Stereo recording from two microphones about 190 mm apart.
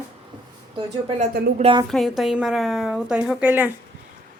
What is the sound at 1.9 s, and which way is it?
A woman's voice, centre (ahead or behind).